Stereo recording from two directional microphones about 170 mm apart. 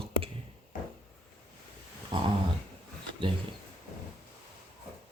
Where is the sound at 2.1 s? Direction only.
25° right (ahead or behind).